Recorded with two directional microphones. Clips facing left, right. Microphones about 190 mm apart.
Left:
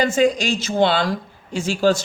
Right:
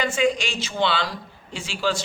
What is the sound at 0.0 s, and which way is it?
Speech, 40° left (ahead or behind).